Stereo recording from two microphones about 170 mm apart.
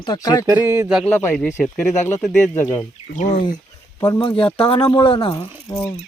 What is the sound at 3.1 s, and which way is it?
Speech, 40° left (ahead or behind).